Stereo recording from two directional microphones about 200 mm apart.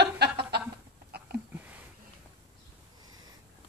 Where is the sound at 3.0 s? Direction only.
20° right (ahead or behind).